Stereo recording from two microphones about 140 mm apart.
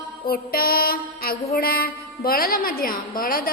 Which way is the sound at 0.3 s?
90° left.